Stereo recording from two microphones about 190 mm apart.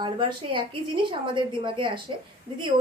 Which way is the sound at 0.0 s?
25° right (ahead or behind).